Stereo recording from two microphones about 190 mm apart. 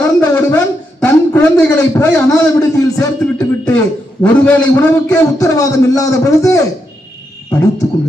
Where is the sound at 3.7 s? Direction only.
5° left (ahead or behind).